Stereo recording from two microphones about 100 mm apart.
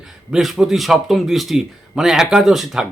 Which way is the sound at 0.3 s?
5° right (ahead or behind).